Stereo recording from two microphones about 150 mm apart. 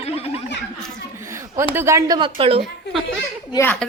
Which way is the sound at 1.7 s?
20° right (ahead or behind).